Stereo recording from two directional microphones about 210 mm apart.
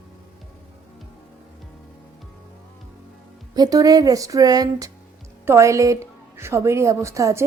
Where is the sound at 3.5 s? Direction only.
20° right (ahead or behind).